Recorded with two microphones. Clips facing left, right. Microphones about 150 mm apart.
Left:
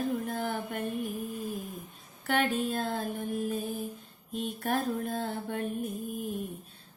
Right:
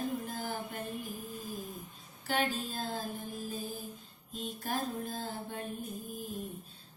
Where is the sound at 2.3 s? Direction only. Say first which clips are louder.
Left 5 dB; 60° left (ahead or behind).